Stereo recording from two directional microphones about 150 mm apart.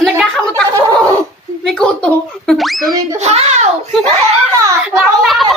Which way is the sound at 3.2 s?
45° right (ahead or behind).